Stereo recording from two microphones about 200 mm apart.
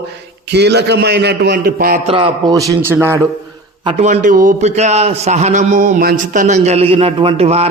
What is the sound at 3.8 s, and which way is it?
A man's voice, 35° right (ahead or behind).